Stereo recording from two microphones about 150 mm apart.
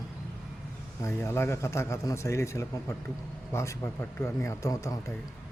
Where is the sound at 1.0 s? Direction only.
15° left (ahead or behind).